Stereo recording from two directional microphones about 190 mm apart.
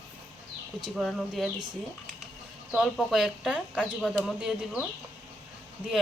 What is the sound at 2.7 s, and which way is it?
Speech, centre (ahead or behind).